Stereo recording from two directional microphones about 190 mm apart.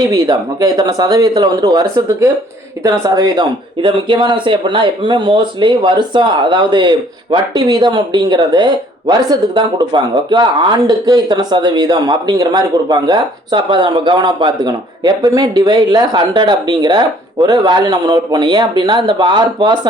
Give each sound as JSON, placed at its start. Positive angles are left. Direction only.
{"t": 0.1, "sound": "speech", "side_deg": -20}